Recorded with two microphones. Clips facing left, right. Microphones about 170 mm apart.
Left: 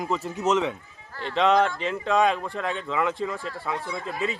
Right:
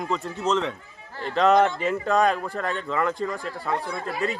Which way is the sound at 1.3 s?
Centre (ahead or behind).